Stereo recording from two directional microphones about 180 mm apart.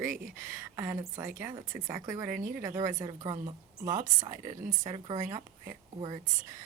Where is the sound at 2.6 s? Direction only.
15° right (ahead or behind).